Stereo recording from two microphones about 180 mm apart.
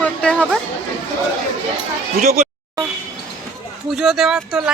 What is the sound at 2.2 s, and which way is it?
Speech, 40° right (ahead or behind).